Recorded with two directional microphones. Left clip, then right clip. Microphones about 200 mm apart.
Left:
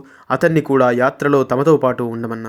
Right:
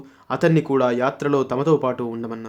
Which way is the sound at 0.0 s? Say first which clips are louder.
Left 4 dB; 20° left (ahead or behind).